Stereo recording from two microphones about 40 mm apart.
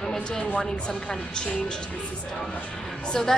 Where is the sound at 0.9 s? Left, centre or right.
Left.